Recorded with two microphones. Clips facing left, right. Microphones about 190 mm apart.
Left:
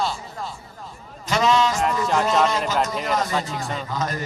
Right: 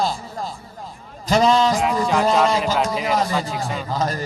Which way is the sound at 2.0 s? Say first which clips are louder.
Right 2 dB; centre (ahead or behind).